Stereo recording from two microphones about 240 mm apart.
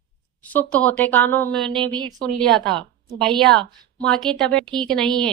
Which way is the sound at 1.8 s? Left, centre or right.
Centre.